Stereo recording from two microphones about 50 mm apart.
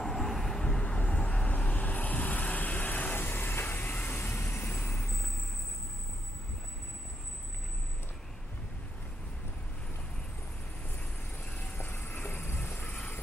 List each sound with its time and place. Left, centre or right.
0.0 s vehicle: centre
0.7 s vehicle: left
3.2 s vehicle: left
11.7 s vehicle: left